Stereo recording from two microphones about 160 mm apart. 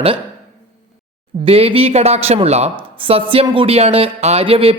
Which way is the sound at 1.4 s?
35° right (ahead or behind).